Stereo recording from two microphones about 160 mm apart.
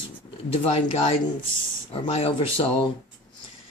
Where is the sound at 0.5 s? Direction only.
40° left (ahead or behind).